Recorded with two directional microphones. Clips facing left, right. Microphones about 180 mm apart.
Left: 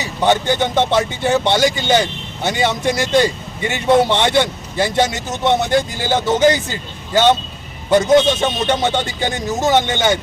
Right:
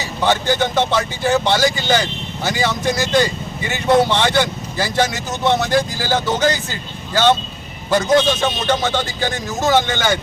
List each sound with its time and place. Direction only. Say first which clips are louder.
0.2 s a man's voice: left 2 dB; 20° left (ahead or behind)